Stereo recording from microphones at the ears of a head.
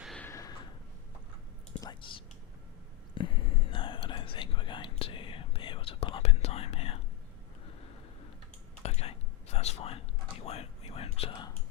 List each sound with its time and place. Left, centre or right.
1.7 s whispering: left
8.8 s whispering: left